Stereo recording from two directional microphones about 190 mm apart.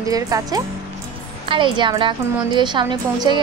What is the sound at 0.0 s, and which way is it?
A woman's voice, 20° right (ahead or behind).